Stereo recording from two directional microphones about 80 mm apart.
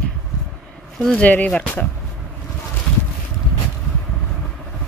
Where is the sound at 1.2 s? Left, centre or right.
Centre.